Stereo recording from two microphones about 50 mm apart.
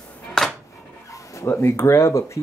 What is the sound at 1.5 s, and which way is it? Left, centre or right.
Speech, left.